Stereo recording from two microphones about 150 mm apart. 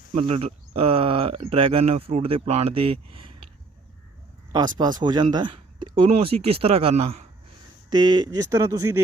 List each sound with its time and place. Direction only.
0.2 s speech: 40° right (ahead or behind)
4.8 s speech: 30° right (ahead or behind); by 7.3 s 45° right (ahead or behind)
7.9 s speech: 30° right (ahead or behind)